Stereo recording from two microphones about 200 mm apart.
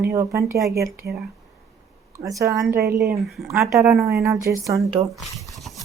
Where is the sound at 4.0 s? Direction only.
15° right (ahead or behind).